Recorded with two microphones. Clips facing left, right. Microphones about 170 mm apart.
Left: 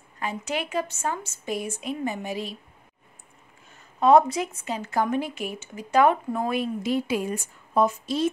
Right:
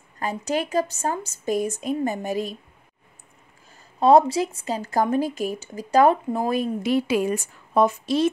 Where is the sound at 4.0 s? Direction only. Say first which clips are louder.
Right 2 dB; 30° right (ahead or behind).